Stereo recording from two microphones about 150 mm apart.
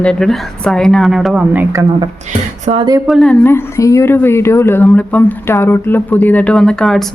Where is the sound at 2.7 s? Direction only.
50° right (ahead or behind).